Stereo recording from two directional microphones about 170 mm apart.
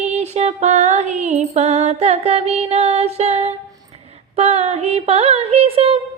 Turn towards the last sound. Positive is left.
turn(degrees=-35)  # may be behind; listen again after turning